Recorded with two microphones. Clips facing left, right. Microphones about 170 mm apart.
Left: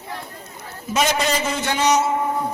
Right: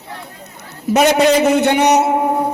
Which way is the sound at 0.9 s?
60° right (ahead or behind).